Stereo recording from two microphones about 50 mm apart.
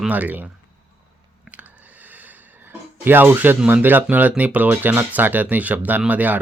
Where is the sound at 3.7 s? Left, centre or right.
Right.